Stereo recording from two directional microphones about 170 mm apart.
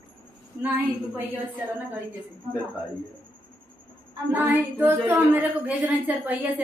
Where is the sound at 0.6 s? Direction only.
10° right (ahead or behind).